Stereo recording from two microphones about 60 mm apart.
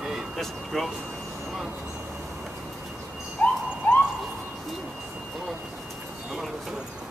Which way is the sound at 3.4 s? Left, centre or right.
Left.